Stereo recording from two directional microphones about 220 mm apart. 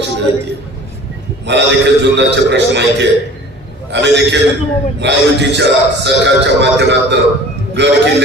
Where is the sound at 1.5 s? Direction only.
50° right (ahead or behind).